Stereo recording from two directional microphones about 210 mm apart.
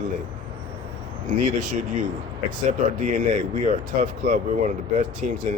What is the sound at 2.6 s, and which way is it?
Speech, 35° right (ahead or behind).